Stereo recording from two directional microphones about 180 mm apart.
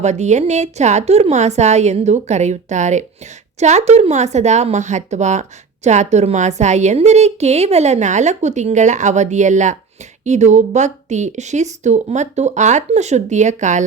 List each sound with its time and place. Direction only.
0.0 s speech: 40° right (ahead or behind)